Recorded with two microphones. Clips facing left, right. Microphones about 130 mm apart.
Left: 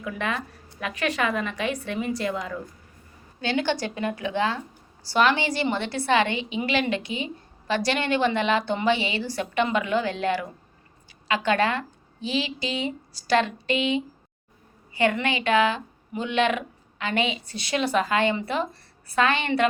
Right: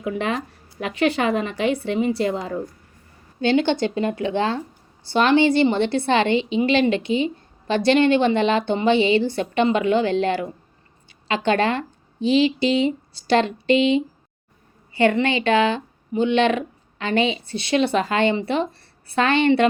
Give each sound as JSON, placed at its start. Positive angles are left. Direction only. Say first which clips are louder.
{"t": 0.0, "sound": "a woman's voice", "louder": "right 5 dB", "side_deg": -30}